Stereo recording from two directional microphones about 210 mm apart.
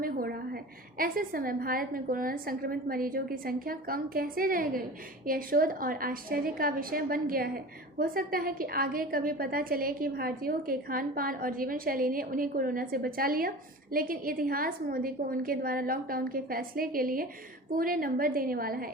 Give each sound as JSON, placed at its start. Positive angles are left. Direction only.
{"t": 0.0, "sound": "a woman's voice", "side_deg": -45}